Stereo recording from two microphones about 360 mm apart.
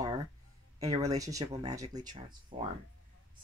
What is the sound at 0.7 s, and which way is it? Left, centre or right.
Speech, centre.